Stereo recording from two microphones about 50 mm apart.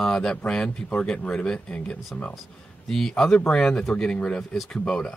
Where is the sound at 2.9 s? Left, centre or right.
Centre.